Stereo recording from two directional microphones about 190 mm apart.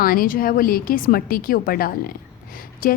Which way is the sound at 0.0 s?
50° left (ahead or behind).